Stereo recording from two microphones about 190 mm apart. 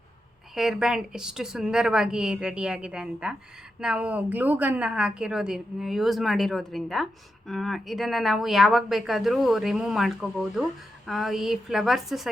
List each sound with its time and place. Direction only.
0.5 s a woman's voice: centre (ahead or behind)